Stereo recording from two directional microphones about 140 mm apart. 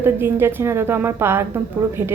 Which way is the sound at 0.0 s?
15° right (ahead or behind).